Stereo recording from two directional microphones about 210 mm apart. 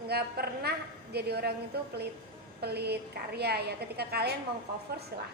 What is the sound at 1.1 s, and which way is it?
A woman's voice, 50° right (ahead or behind).